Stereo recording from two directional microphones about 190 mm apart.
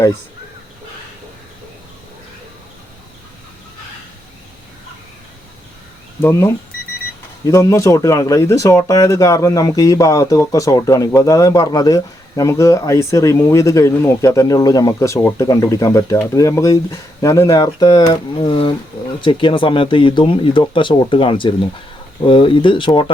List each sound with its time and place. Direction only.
6.2 s speech: 15° left (ahead or behind)